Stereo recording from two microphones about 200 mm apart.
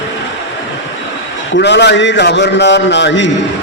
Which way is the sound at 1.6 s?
60° left (ahead or behind).